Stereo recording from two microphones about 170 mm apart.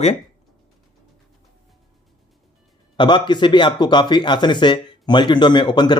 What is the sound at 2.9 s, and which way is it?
Speech, 25° left (ahead or behind).